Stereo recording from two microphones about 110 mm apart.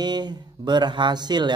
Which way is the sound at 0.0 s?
40° right (ahead or behind).